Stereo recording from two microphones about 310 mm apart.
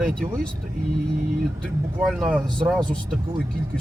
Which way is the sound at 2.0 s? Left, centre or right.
Centre.